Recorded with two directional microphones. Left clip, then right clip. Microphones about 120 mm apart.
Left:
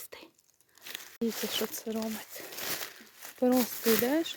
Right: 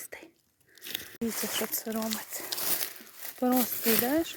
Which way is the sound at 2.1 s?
90° right.